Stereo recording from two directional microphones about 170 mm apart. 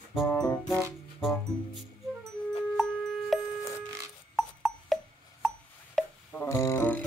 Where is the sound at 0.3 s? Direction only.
5° left (ahead or behind).